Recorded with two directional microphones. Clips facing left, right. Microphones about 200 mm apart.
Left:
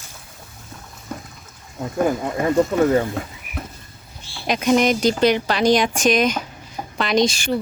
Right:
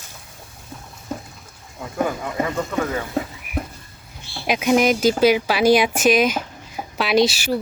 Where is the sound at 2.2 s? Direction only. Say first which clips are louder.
Left 6 dB; 35° left (ahead or behind).